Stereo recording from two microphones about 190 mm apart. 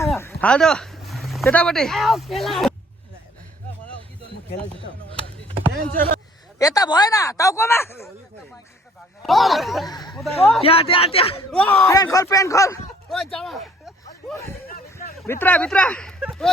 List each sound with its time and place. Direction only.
0.2 s a sound: 10° left (ahead or behind)
1.5 s speech: 5° left (ahead or behind)
4.9 s speech: 75° left (ahead or behind)
5.7 s speech: 45° right (ahead or behind)
6.6 s speech: 20° left (ahead or behind)
9.2 s speech: centre (ahead or behind)
10.6 s a man's voice: 30° left (ahead or behind)
11.5 s speech: 10° left (ahead or behind)
13.1 s a sound: centre (ahead or behind)
15.3 s speech: 10° left (ahead or behind)